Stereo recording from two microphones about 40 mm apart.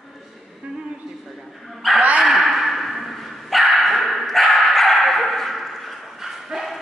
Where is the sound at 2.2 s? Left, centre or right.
Centre.